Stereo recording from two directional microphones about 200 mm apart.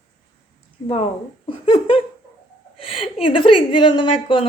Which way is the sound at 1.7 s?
25° left (ahead or behind).